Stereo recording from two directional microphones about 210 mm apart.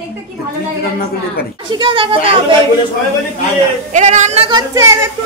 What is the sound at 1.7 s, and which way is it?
Speech, 20° right (ahead or behind).